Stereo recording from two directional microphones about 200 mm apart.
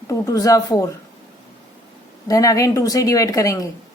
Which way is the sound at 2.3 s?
15° left (ahead or behind).